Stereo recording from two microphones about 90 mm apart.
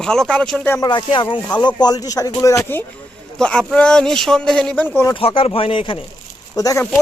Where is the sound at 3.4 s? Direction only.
10° left (ahead or behind).